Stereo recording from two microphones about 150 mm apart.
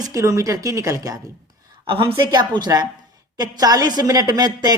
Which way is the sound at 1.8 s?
35° right (ahead or behind).